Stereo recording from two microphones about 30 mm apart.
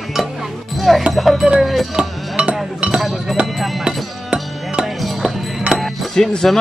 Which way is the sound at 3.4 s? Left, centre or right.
Right.